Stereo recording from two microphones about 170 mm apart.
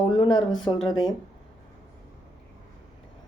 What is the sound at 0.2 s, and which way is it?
Speech, 25° left (ahead or behind).